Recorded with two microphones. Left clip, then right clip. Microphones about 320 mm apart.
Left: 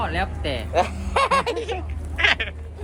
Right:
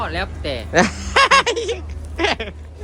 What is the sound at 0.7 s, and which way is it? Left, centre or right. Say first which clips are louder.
Speech: right 6 dB; right.